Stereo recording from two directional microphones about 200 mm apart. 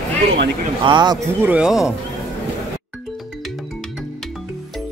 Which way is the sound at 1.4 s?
5° right (ahead or behind).